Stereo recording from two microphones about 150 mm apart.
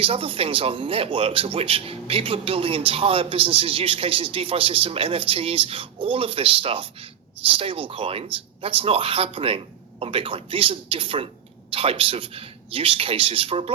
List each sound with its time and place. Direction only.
0.0 s speech: 35° right (ahead or behind)